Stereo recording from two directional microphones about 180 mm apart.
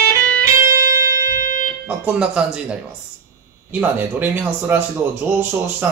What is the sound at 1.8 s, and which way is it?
Speech, 5° right (ahead or behind).